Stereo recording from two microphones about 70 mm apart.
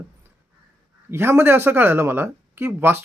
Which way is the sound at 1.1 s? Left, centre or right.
Right.